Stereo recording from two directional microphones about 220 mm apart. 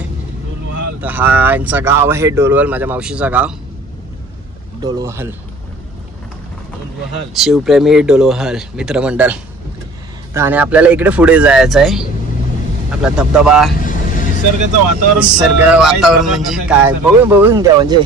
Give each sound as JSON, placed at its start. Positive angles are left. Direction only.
{"t": 1.0, "sound": "speech", "side_deg": -10}
{"t": 4.8, "sound": "speech", "side_deg": -15}
{"t": 7.3, "sound": "speech", "side_deg": 0}
{"t": 13.7, "sound": "vehicle", "side_deg": 35}
{"t": 15.1, "sound": "speech", "side_deg": -5}